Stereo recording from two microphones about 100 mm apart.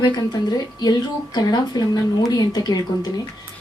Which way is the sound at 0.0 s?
40° left (ahead or behind).